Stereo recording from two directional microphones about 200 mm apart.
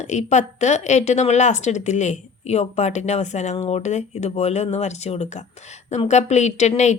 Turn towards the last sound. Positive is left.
turn(degrees=35)  # may be behind; listen again after turning